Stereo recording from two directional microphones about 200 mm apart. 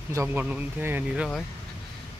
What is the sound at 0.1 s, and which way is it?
Speech, 10° right (ahead or behind).